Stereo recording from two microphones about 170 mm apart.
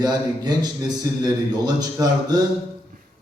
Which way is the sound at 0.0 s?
25° right (ahead or behind).